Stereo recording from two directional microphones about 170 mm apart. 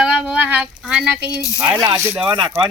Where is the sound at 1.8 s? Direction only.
25° right (ahead or behind).